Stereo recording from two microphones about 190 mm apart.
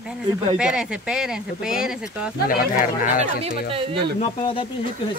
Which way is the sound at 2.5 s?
45° left (ahead or behind).